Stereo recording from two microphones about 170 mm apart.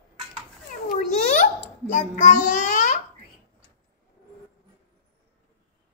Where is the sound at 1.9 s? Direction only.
50° left (ahead or behind).